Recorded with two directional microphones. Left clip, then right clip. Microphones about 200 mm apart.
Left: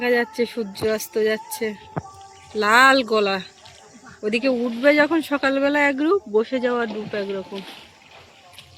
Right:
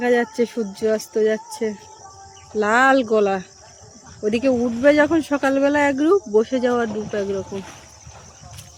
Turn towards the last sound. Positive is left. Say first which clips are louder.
# right 3 dB
turn(degrees=-35)  # may be behind; listen again after turning